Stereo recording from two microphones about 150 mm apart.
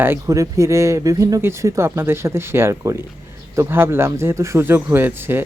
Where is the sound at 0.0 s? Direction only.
20° right (ahead or behind).